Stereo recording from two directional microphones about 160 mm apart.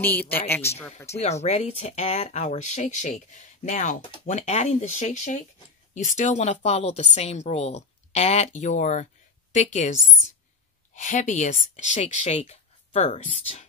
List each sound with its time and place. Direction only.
0.0 s speech: 10° left (ahead or behind)
1.1 s speech: 45° left (ahead or behind)
11.0 s speech: 50° left (ahead or behind)